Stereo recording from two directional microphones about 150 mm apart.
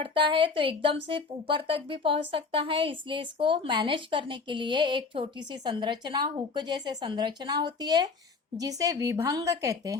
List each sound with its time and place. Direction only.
0.0 s a woman's voice: 35° right (ahead or behind)